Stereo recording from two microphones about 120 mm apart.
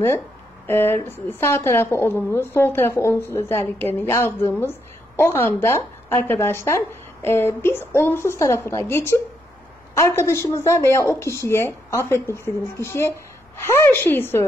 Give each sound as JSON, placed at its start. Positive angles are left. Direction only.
{"t": 0.7, "sound": "a woman's voice", "side_deg": 20}